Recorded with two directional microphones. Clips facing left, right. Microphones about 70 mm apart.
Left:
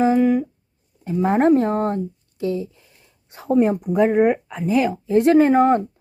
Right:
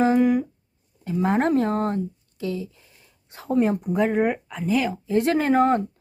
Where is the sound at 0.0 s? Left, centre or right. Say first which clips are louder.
Left 2 dB; centre.